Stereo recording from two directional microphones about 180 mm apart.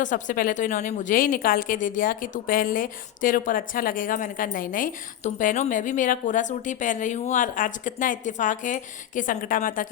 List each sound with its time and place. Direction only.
0.0 s a woman's voice: 45° left (ahead or behind)